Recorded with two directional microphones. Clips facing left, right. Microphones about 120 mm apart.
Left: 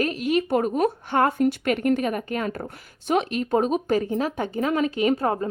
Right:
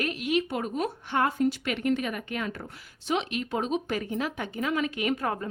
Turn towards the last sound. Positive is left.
turn(degrees=30)  # may be behind; listen again after turning